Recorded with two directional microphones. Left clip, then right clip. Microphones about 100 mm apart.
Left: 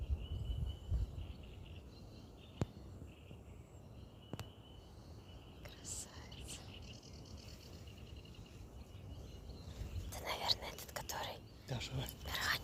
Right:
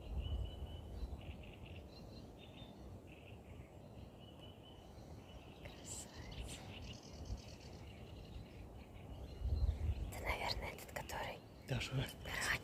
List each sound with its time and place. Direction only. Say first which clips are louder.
6.3 s a sound: right 1 dB; 10° right (ahead or behind)
10.1 s whispering: left 3 dB; 5° right (ahead or behind)
11.7 s speech: right 2 dB; 40° right (ahead or behind)
12.2 s dog: left 2 dB; 5° right (ahead or behind)